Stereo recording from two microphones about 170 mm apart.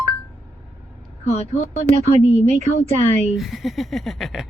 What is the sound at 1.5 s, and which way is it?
Speech, 40° left (ahead or behind).